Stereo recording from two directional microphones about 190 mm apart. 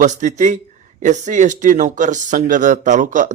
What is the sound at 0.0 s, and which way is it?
Speech, 40° right (ahead or behind).